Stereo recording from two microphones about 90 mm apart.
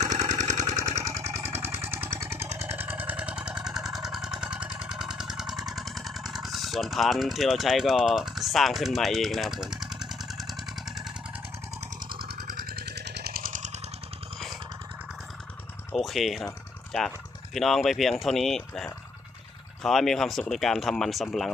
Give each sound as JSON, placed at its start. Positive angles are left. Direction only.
{"t": 0.0, "sound": "vehicle", "side_deg": -45}
{"t": 16.0, "sound": "speech", "side_deg": 0}
{"t": 17.5, "sound": "speech", "side_deg": 0}